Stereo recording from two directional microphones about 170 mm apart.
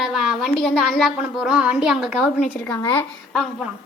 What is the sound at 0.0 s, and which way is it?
A woman's voice, centre (ahead or behind).